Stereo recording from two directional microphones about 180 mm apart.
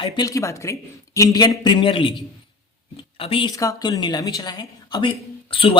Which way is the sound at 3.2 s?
30° left (ahead or behind).